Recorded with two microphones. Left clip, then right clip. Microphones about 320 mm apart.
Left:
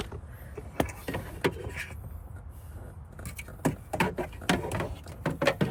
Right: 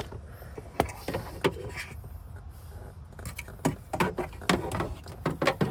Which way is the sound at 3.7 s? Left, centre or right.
Centre.